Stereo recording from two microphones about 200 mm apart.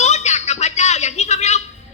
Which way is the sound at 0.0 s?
35° left (ahead or behind).